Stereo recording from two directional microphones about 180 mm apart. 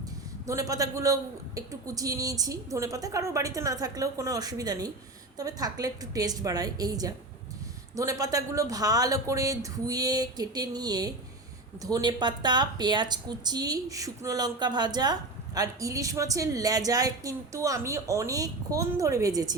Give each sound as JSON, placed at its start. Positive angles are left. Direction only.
{"t": 0.4, "sound": "a woman's voice", "side_deg": -20}